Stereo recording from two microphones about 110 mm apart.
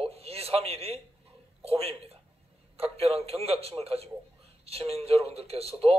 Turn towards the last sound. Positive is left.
turn(degrees=-60)  # may be behind; listen again after turning